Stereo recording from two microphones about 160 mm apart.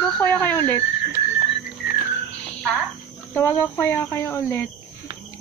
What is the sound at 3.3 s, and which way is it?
Speech, 15° left (ahead or behind).